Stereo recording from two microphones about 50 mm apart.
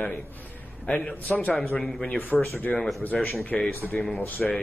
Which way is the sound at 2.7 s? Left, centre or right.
Left.